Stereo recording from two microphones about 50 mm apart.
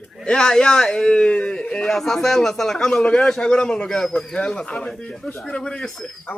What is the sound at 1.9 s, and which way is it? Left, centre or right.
A man's voice, centre.